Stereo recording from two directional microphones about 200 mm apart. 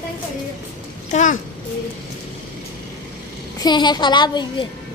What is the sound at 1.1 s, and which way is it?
Speech, 40° left (ahead or behind).